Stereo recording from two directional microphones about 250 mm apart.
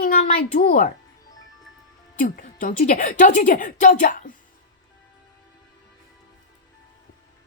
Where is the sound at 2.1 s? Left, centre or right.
Left.